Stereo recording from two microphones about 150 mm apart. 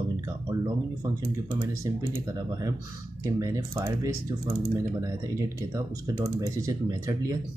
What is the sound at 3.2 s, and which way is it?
Speech, 25° right (ahead or behind).